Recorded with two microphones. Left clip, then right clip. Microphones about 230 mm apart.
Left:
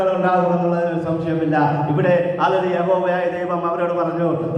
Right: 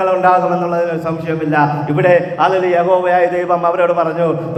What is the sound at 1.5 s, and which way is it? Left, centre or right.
A man's voice, right.